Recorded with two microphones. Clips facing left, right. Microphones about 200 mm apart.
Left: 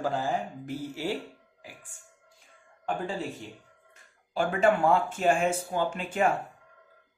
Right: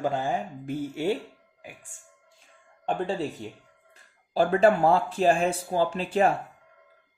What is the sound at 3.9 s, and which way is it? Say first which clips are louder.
Speech: right 4 dB; 35° right (ahead or behind).